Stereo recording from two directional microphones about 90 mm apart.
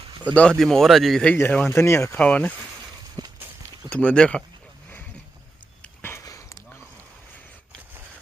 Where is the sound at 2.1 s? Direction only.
15° left (ahead or behind).